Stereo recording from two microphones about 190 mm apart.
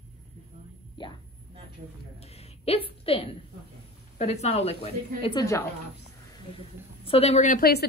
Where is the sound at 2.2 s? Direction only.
35° left (ahead or behind).